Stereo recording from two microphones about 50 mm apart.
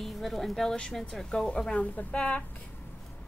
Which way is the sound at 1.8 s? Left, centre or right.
Left.